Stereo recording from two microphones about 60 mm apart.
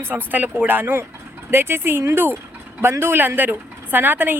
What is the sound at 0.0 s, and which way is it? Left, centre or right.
Speech, right.